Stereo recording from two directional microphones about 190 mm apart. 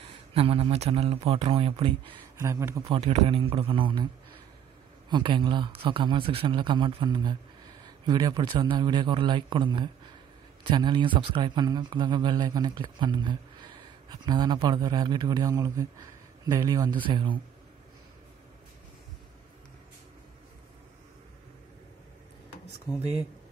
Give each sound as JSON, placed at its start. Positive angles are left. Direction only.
{"t": 0.3, "sound": "speech", "side_deg": -30}
{"t": 2.4, "sound": "speech", "side_deg": -15}
{"t": 2.8, "sound": "a man's voice", "side_deg": -30}
{"t": 5.1, "sound": "a man's voice", "side_deg": -25}
{"t": 22.8, "sound": "speech", "side_deg": -5}